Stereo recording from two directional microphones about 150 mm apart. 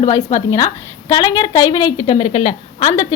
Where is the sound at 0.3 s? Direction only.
20° left (ahead or behind); by 2.6 s 40° left (ahead or behind).